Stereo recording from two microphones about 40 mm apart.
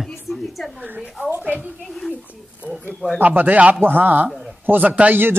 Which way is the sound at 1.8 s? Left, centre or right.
Centre.